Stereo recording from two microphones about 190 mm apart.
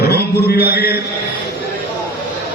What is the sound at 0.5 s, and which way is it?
Speech, 55° left (ahead or behind).